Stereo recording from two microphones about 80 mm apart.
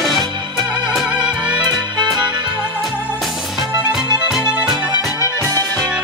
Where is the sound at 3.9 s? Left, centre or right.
Centre.